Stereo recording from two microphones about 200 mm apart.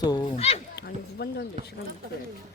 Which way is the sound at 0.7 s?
55° left (ahead or behind).